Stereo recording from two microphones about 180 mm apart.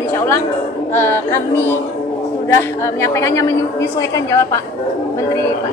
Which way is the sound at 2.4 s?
15° left (ahead or behind).